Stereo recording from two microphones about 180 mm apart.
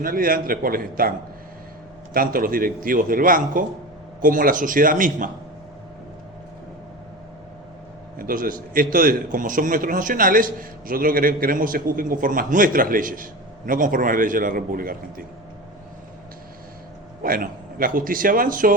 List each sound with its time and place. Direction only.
0.0 s a man's voice: 50° right (ahead or behind)
2.1 s a man's voice: 50° right (ahead or behind)
8.2 s a man's voice: 50° right (ahead or behind)
17.2 s a man's voice: 55° right (ahead or behind)